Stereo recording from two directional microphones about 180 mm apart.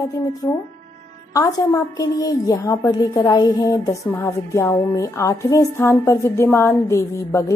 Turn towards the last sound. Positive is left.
turn(degrees=15)  # may be behind; listen again after turning